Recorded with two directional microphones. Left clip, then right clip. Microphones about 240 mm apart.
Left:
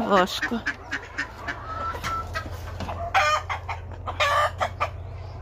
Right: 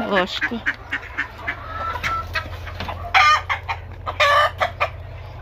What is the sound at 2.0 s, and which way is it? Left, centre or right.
Chicken, centre.